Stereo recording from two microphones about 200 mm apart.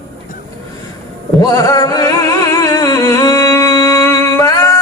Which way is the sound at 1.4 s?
20° left (ahead or behind).